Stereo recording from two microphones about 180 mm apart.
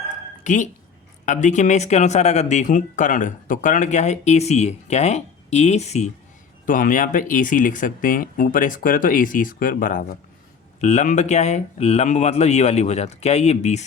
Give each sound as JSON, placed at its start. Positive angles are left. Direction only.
{"t": 0.4, "sound": "speech", "side_deg": 45}
{"t": 6.7, "sound": "speech", "side_deg": 50}